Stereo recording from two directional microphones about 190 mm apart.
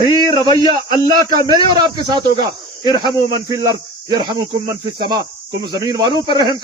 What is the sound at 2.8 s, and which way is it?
Speech, 20° left (ahead or behind).